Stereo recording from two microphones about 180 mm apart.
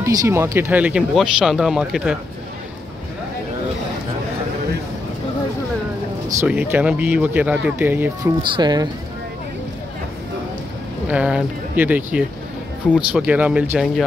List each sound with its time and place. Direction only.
0.0 s speech: 15° right (ahead or behind)
6.4 s speech: 5° right (ahead or behind)
8.4 s speech: 25° right (ahead or behind)
11.1 s speech: 5° right (ahead or behind)